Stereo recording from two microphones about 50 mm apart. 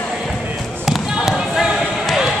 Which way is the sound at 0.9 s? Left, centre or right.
Centre.